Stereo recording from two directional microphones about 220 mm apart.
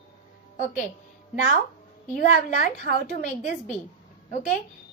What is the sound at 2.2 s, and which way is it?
A woman's voice, 40° left (ahead or behind).